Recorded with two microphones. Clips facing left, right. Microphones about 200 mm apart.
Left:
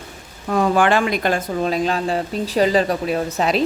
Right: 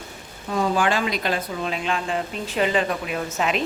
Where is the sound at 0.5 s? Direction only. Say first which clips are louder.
Left 5 dB; 60° left (ahead or behind).